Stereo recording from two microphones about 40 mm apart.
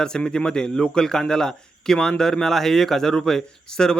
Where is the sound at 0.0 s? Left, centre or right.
Centre.